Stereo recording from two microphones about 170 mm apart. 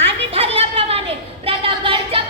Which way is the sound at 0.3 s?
35° right (ahead or behind).